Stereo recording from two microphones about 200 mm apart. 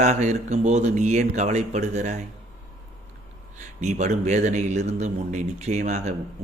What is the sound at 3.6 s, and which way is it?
Speech, 35° right (ahead or behind).